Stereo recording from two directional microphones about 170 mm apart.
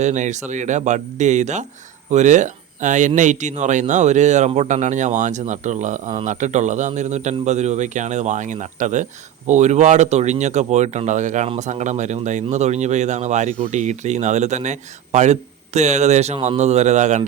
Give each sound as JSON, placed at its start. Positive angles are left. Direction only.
{"t": 0.0, "sound": "speech", "side_deg": -45}